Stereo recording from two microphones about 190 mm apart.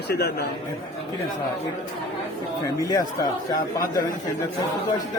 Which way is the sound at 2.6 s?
20° left (ahead or behind).